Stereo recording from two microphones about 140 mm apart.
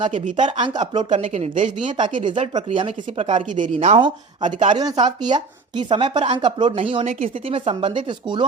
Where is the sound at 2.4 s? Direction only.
45° right (ahead or behind).